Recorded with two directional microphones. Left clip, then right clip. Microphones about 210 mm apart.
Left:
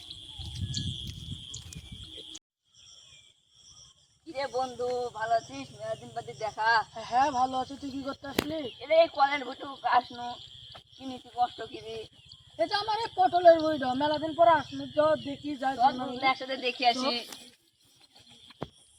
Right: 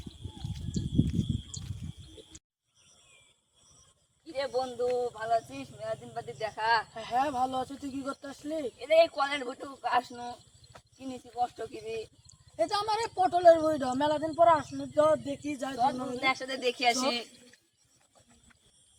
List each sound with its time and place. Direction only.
4.3 s speech: 25° right (ahead or behind)
6.1 s speech: 20° right (ahead or behind)